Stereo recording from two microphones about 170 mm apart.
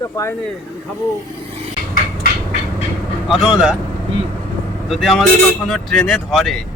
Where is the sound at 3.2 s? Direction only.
5° right (ahead or behind).